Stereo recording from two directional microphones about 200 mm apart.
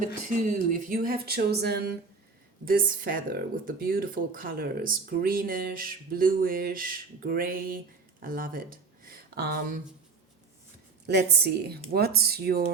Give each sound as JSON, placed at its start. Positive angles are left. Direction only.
{"t": 0.4, "sound": "speech", "side_deg": -45}
{"t": 11.0, "sound": "speech", "side_deg": -55}